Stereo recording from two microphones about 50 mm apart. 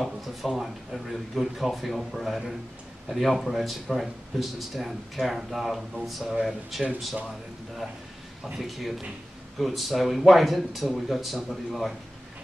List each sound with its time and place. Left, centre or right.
0.0 s speech: centre
8.5 s speech: centre